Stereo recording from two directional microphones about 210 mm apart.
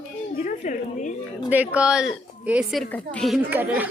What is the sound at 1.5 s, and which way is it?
A woman's voice, 5° right (ahead or behind).